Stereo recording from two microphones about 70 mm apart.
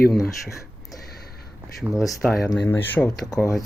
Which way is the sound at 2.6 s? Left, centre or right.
Left.